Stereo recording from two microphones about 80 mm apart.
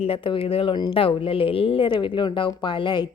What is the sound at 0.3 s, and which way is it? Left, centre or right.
A woman's voice, left.